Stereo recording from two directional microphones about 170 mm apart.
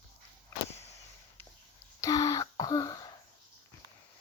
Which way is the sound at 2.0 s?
20° left (ahead or behind).